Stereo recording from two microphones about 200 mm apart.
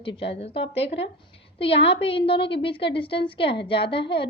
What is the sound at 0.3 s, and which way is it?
Speech, 30° left (ahead or behind).